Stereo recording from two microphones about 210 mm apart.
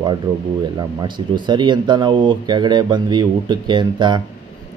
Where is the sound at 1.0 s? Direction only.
20° right (ahead or behind).